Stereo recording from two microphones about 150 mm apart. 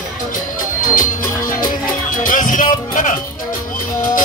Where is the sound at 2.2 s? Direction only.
65° left (ahead or behind).